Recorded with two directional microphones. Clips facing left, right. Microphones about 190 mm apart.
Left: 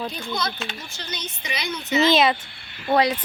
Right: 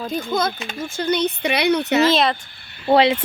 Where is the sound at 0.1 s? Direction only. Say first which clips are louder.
Right 7 dB; 50° right (ahead or behind); by 2.0 s 65° right (ahead or behind).